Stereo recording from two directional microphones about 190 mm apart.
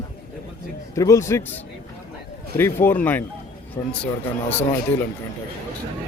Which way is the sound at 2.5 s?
10° left (ahead or behind).